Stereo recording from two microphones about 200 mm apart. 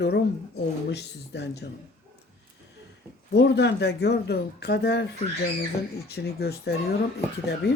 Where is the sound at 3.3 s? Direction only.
60° left (ahead or behind).